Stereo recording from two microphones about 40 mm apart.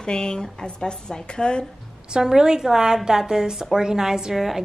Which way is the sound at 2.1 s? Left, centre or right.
Centre.